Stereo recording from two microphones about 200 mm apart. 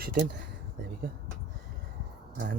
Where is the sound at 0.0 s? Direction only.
50° right (ahead or behind).